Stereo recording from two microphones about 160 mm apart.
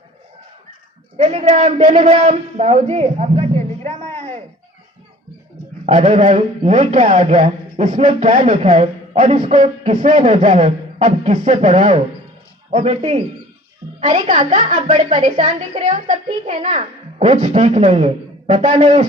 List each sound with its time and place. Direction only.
1.1 s a woman's voice: 40° right (ahead or behind)
4.0 s a sound: 10° left (ahead or behind)
5.8 s a woman's voice: 45° right (ahead or behind)
8.6 s speech: 35° right (ahead or behind)
9.1 s a woman's voice: 50° right (ahead or behind)
14.0 s a woman's voice: 50° right (ahead or behind)